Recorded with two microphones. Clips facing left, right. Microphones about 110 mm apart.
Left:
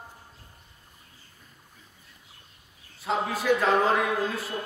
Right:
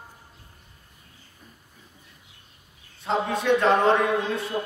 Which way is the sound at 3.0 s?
5° left (ahead or behind).